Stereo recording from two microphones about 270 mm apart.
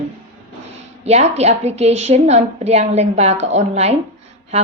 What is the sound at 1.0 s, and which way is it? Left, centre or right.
A woman's voice, right.